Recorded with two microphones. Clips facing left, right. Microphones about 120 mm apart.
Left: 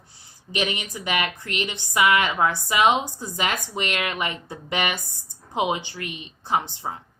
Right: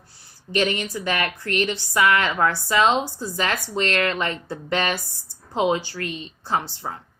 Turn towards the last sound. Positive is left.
turn(degrees=20)  # may be behind; listen again after turning